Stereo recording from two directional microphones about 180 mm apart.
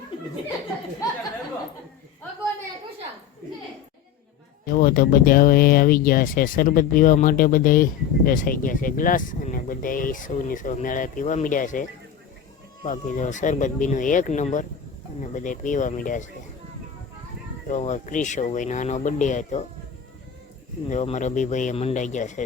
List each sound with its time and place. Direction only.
4.6 s speech: 50° left (ahead or behind)
17.7 s speech: 40° left (ahead or behind)
20.9 s speech: 40° left (ahead or behind)